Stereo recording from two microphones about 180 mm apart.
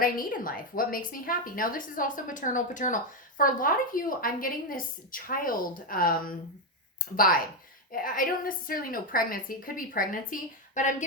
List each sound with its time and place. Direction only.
0.0 s a woman's voice: 50° left (ahead or behind)
7.9 s a woman's voice: 50° left (ahead or behind)